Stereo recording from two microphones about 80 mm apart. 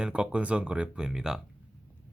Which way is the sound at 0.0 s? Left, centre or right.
Centre.